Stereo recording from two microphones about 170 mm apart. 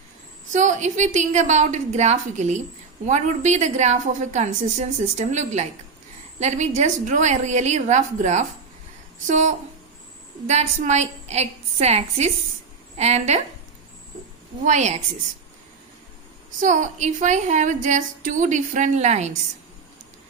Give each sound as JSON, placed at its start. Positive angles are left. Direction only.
{"t": 0.5, "sound": "a woman's voice", "side_deg": -45}
{"t": 14.6, "sound": "speech", "side_deg": -45}
{"t": 16.6, "sound": "speech", "side_deg": -45}